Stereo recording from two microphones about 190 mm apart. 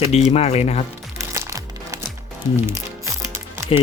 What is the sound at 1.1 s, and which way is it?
Music, 15° right (ahead or behind).